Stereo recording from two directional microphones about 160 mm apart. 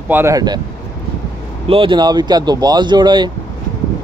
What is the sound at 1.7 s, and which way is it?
A man's voice, 30° right (ahead or behind).